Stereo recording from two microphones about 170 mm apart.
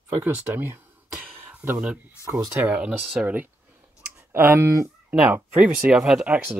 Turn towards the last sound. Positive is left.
turn(degrees=-5)  # may be behind; listen again after turning